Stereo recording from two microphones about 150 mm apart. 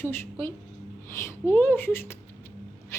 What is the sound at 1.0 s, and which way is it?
Speech, 15° left (ahead or behind).